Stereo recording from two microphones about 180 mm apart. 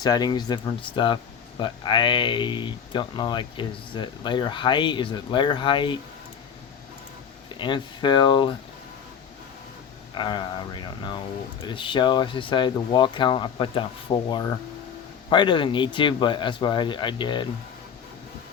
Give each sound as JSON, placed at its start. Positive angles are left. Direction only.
{"t": 0.0, "sound": "speech", "side_deg": 20}
{"t": 7.6, "sound": "speech", "side_deg": 25}
{"t": 10.2, "sound": "speech", "side_deg": 25}